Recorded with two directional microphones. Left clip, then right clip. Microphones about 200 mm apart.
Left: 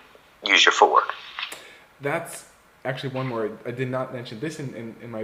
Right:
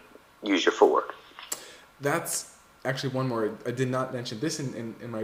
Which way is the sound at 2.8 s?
5° right (ahead or behind).